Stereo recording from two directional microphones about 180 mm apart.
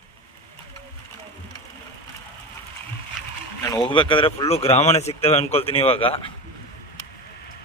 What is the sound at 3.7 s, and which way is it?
A man's voice, 25° left (ahead or behind).